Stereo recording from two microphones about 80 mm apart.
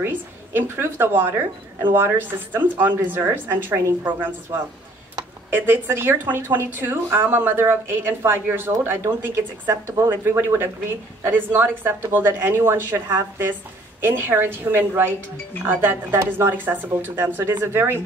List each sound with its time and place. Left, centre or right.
0.0 s speech: right